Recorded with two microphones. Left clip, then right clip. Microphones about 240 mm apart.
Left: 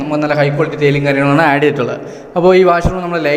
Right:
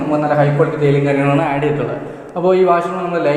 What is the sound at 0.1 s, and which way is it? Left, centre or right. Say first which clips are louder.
A man's voice: left 1 dB; left.